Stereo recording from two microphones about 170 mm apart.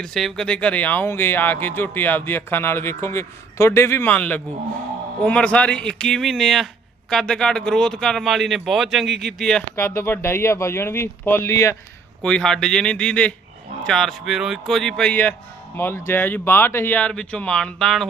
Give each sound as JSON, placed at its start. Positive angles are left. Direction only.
{"t": 0.0, "sound": "speech", "side_deg": 0}
{"t": 9.8, "sound": "speech", "side_deg": 15}
{"t": 12.2, "sound": "speech", "side_deg": 5}